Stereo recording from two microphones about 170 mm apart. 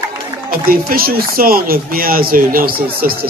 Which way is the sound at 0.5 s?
60° right (ahead or behind).